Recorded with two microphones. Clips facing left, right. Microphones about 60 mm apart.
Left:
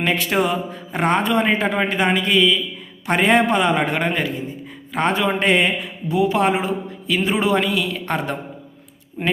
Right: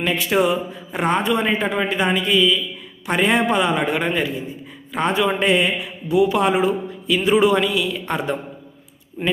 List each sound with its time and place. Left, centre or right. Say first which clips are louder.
0.0 s speech: right 1 dB; left
6.1 s a man's voice: right 1 dB; left